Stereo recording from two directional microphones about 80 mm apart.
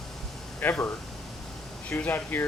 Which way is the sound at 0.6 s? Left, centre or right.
Left.